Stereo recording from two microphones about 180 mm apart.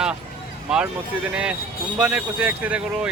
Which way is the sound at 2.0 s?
5° right (ahead or behind).